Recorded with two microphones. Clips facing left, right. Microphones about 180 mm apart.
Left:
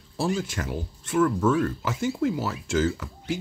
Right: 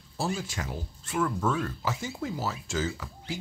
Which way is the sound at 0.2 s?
55° left (ahead or behind).